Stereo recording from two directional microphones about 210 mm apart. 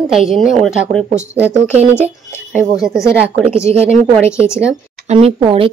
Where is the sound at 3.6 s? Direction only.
30° right (ahead or behind).